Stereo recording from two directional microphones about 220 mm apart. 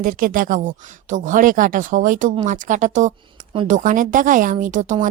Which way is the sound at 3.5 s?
25° right (ahead or behind).